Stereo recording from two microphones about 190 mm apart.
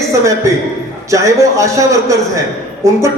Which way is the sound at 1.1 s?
15° right (ahead or behind).